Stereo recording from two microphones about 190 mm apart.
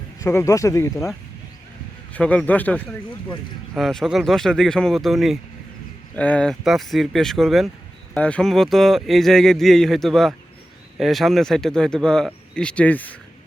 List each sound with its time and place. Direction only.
0.2 s speech: 15° left (ahead or behind)
2.1 s speech: 5° left (ahead or behind)